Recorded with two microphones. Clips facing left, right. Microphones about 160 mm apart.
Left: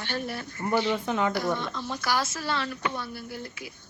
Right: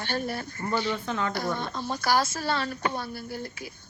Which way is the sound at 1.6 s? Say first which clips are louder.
Right 2 dB; 40° right (ahead or behind).